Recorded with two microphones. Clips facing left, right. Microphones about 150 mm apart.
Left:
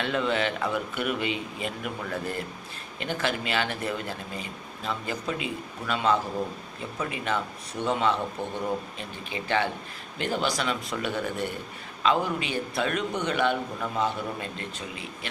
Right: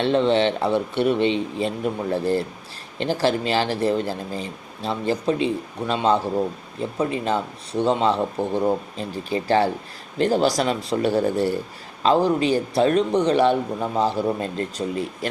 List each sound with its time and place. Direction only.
0.0 s a man's voice: 30° right (ahead or behind)